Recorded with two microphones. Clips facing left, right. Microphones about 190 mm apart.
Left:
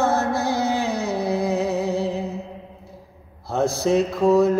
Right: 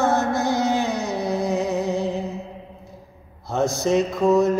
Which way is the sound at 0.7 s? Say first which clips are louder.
Even; 30° left (ahead or behind).